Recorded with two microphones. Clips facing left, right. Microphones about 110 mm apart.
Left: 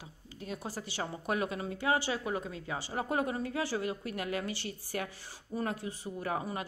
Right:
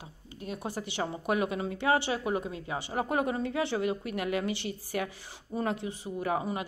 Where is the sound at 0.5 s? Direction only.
20° right (ahead or behind).